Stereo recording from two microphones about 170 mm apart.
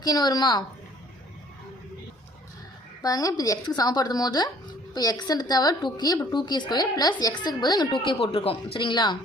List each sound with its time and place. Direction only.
0.0 s speech: 25° left (ahead or behind)
3.0 s speech: 20° left (ahead or behind)